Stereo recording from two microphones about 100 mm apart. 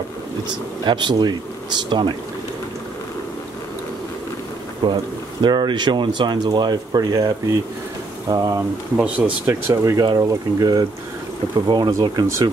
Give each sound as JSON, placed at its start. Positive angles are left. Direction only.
{"t": 0.8, "sound": "speech", "side_deg": -50}
{"t": 4.8, "sound": "speech", "side_deg": -50}
{"t": 9.0, "sound": "speech", "side_deg": -10}
{"t": 9.5, "sound": "speech", "side_deg": -30}